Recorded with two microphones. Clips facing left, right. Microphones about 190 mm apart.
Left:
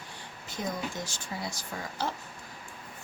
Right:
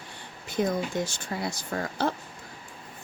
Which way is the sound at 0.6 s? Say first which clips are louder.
Right 8 dB; 65° right (ahead or behind).